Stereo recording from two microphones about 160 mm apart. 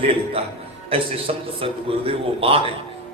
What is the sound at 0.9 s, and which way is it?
A man's voice, 35° right (ahead or behind).